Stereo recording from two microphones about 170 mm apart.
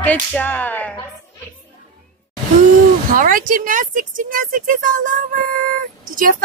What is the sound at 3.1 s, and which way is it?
Speech, 55° right (ahead or behind).